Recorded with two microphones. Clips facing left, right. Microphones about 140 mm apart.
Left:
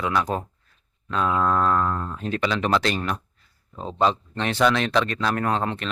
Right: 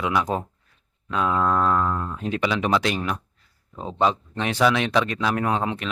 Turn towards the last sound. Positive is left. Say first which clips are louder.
# even
turn(degrees=-10)  # may be behind; listen again after turning